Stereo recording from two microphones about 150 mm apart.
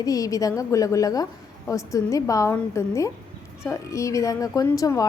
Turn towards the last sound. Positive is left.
turn(degrees=25)  # may be behind; listen again after turning